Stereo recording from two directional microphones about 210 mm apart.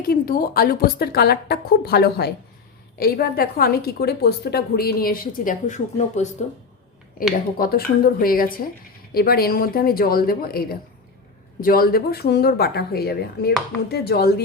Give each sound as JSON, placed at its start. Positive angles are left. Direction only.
{"t": 0.1, "sound": "a woman's voice", "side_deg": 45}